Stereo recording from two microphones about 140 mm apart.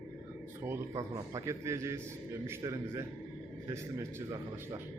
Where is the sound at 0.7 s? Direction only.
25° right (ahead or behind).